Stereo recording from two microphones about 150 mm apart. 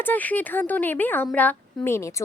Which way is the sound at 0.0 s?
10° left (ahead or behind).